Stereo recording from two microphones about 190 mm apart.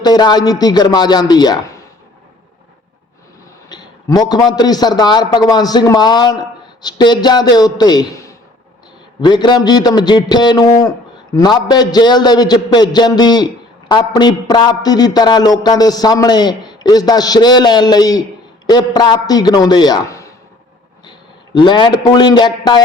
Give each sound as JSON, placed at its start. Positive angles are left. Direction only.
{"t": 0.0, "sound": "a man's voice", "side_deg": 20}
{"t": 3.7, "sound": "a man's voice", "side_deg": 20}